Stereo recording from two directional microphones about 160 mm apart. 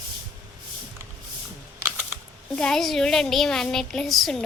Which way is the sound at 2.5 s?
5° left (ahead or behind).